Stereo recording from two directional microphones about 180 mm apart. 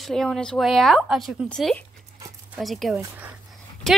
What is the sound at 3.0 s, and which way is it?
Speech, 10° right (ahead or behind).